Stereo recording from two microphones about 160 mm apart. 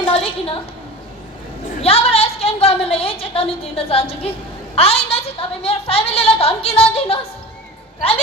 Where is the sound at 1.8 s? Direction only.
40° left (ahead or behind).